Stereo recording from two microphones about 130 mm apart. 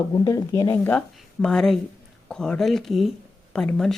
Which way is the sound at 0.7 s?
10° left (ahead or behind).